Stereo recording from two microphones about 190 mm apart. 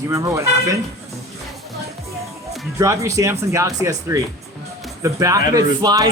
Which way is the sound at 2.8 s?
15° right (ahead or behind).